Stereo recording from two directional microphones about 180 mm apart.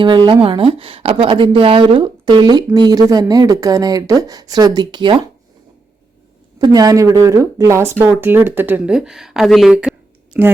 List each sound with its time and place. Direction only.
0.3 s speech: 25° right (ahead or behind)
6.6 s speech: 20° right (ahead or behind)